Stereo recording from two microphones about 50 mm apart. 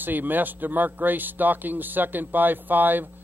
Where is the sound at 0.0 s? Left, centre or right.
Right.